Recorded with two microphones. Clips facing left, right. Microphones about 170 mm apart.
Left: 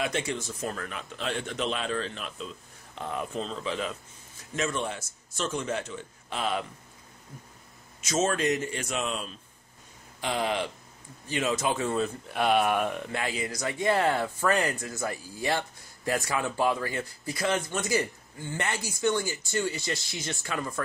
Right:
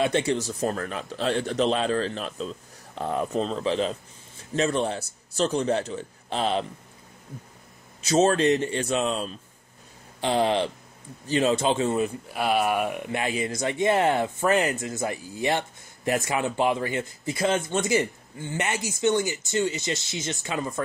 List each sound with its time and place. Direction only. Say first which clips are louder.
0.0 s a man's voice: right 7 dB; 35° right (ahead or behind)
8.0 s a man's voice: right 6 dB; 35° right (ahead or behind)
12.3 s speech: left 2 dB; 5° right (ahead or behind); by 20.8 s 20° right (ahead or behind)